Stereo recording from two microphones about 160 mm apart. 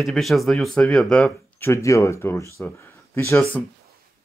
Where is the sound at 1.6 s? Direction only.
15° left (ahead or behind).